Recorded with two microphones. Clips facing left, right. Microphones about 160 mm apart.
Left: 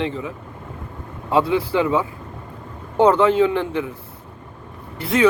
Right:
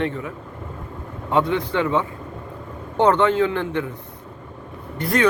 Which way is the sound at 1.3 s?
5° left (ahead or behind).